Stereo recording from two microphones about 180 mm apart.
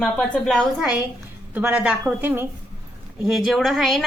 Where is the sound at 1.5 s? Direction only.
10° right (ahead or behind).